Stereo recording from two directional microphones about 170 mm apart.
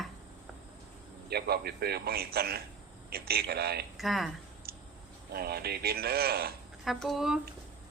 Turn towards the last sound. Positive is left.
turn(degrees=-5)  # may be behind; listen again after turning